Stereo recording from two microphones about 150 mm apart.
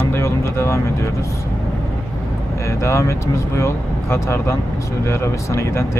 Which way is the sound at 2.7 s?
20° left (ahead or behind).